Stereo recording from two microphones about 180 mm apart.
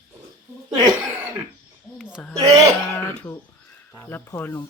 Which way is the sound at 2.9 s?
10° left (ahead or behind).